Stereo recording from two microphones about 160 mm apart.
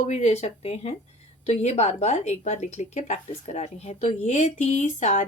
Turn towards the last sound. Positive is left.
turn(degrees=45)  # may be behind; listen again after turning